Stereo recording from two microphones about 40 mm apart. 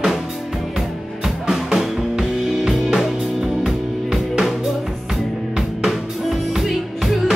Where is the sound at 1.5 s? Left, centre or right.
Centre.